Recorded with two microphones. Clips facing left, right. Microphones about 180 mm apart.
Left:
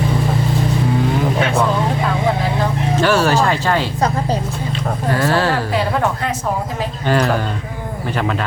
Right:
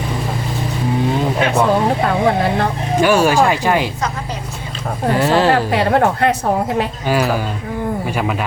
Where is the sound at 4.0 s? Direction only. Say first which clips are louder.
Left 5 dB; 35° left (ahead or behind).